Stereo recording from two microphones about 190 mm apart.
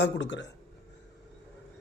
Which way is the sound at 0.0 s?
65° left (ahead or behind).